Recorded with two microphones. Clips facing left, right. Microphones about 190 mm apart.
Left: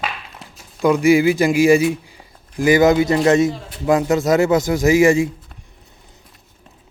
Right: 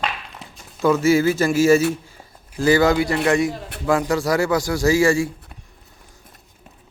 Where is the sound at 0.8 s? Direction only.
15° left (ahead or behind).